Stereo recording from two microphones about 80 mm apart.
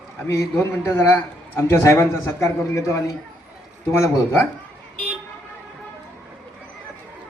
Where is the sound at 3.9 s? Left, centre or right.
Left.